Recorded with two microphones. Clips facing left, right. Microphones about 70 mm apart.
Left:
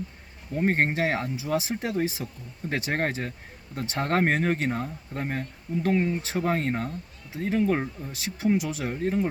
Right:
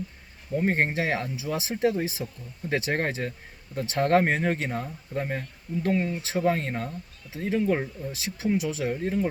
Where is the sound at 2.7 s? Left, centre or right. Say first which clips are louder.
Right 1 dB; left.